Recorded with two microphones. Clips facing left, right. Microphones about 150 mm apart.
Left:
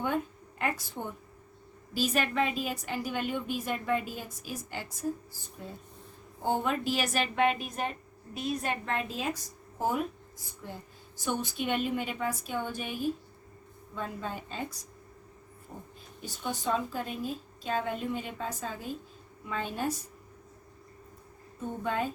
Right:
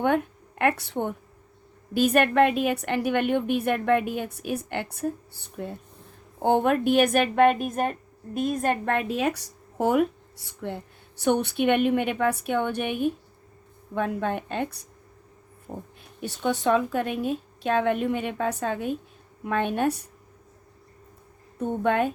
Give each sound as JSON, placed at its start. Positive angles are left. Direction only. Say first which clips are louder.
{"t": 0.0, "sound": "a woman's voice", "louder": "right 8 dB", "side_deg": -65}
{"t": 16.2, "sound": "a woman's voice", "louder": "right 9 dB", "side_deg": -70}
{"t": 21.6, "sound": "a woman's voice", "louder": "right 8 dB", "side_deg": -65}